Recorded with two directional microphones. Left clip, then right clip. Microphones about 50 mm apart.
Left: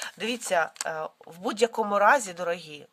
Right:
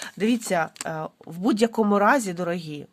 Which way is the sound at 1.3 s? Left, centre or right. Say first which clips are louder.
Right 3 dB; centre.